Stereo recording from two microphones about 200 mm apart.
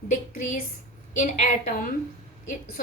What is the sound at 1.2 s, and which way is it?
Speech, 40° left (ahead or behind).